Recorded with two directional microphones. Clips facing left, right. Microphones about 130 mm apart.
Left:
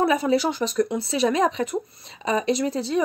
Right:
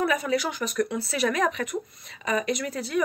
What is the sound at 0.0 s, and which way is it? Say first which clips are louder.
Speech: left 5 dB; 30° left (ahead or behind).